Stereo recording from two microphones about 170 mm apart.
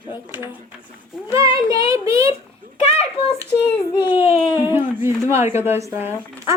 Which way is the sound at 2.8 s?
35° left (ahead or behind).